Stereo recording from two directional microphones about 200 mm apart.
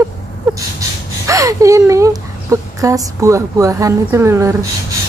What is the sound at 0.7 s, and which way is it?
Speech, 15° right (ahead or behind).